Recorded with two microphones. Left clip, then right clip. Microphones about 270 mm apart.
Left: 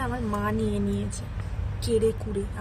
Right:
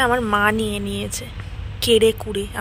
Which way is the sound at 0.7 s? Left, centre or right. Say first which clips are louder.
Right 4 dB; centre.